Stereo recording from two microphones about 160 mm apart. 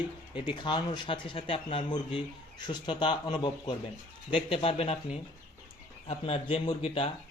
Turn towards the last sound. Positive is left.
turn(degrees=35)  # may be behind; listen again after turning